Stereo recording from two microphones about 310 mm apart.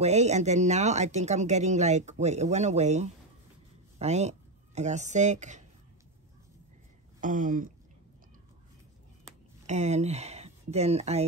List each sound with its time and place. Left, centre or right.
0.0 s speech: right
7.2 s speech: right
9.7 s speech: right